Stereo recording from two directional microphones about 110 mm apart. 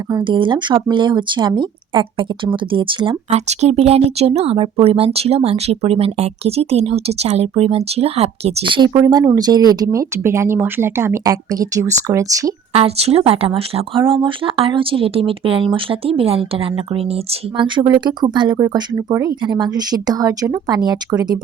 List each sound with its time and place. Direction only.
0.3 s speech: 45° right (ahead or behind)
3.3 s speech: 75° right (ahead or behind)
8.6 s speech: 50° right (ahead or behind)
9.0 s speech: 35° right (ahead or behind)
12.7 s speech: 65° right (ahead or behind)
17.6 s speech: 45° right (ahead or behind)
18.9 s speech: 25° right (ahead or behind)
19.5 s speech: 40° right (ahead or behind)